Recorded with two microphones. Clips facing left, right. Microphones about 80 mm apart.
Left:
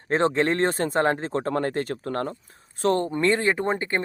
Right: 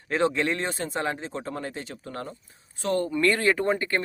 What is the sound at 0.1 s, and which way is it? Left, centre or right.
Speech, left.